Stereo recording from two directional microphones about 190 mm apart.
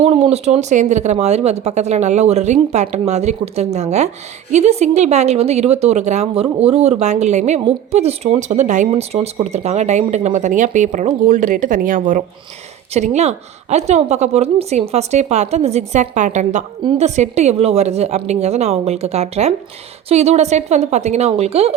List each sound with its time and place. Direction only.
0.0 s speech: 35° right (ahead or behind)